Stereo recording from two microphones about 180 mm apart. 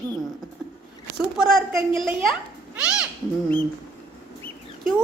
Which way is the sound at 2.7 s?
5° right (ahead or behind).